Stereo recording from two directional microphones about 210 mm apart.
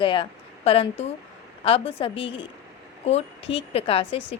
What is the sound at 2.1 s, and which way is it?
Speech, 60° left (ahead or behind).